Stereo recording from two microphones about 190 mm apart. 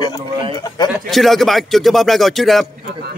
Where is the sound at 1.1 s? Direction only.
Centre (ahead or behind).